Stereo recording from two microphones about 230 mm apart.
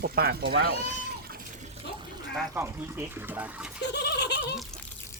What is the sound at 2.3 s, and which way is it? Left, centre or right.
Speech, centre.